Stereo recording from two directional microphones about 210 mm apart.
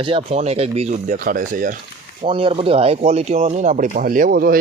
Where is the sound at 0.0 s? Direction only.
25° right (ahead or behind); by 1.7 s 40° right (ahead or behind).